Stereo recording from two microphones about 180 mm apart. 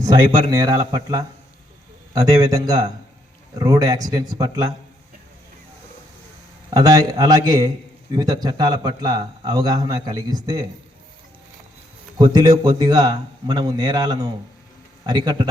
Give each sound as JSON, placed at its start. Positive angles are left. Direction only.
{"t": 0.0, "sound": "a man's voice", "side_deg": -20}
{"t": 6.7, "sound": "a man's voice", "side_deg": -20}
{"t": 12.2, "sound": "a man's voice", "side_deg": -20}